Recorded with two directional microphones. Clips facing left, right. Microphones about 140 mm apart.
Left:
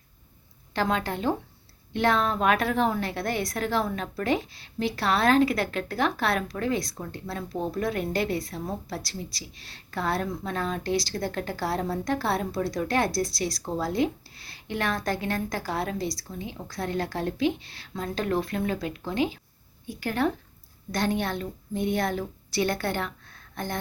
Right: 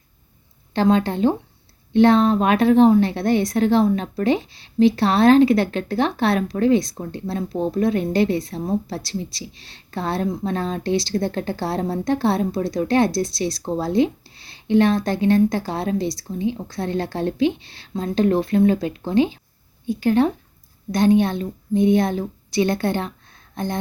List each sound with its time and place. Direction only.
0.7 s speech: 25° right (ahead or behind)